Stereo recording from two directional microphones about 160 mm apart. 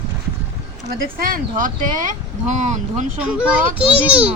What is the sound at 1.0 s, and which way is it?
Speech, 60° right (ahead or behind).